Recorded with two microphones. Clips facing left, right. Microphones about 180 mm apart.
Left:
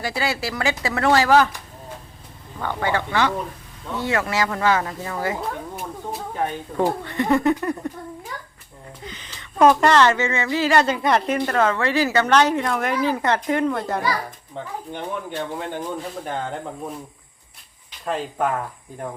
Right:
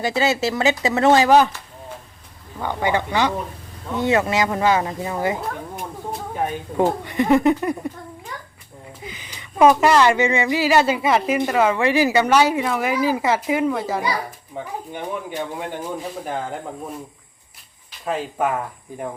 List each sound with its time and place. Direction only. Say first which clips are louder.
0.0 s speech: right 5 dB; 20° right (ahead or behind)
2.6 s a child's voice: right 2 dB; 15° right (ahead or behind)
5.7 s a sound: right 1 dB; 5° left (ahead or behind)
6.3 s a child's voice: right 2 dB; 10° right (ahead or behind)
9.0 s a child's voice: right 1 dB; 10° right (ahead or behind)
18.0 s a child's voice: right 1 dB; 5° right (ahead or behind)